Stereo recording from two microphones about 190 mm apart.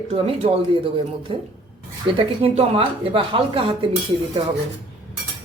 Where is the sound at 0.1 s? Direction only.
30° right (ahead or behind).